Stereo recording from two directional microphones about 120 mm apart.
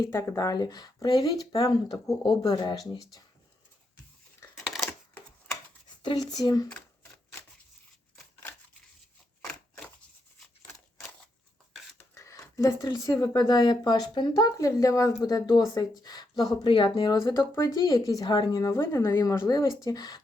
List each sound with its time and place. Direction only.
0.0 s speech: 20° left (ahead or behind)
4.5 s crushing: centre (ahead or behind)
4.9 s typewriter: 15° left (ahead or behind)
6.0 s speech: 35° left (ahead or behind)
12.1 s speech: 25° left (ahead or behind)
17.3 s speech: 20° left (ahead or behind)